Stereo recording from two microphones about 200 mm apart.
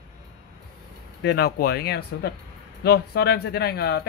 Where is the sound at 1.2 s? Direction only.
50° left (ahead or behind).